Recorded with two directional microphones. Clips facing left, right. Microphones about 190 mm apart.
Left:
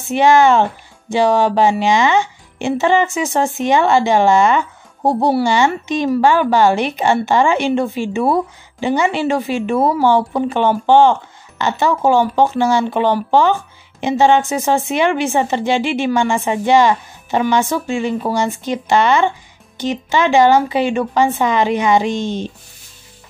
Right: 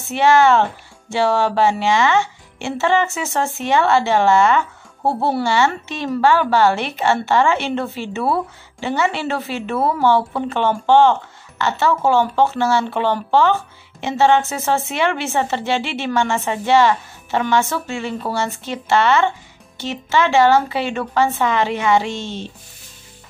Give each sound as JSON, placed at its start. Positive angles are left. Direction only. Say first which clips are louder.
{"t": 0.1, "sound": "speech", "louder": "left 2 dB", "side_deg": 15}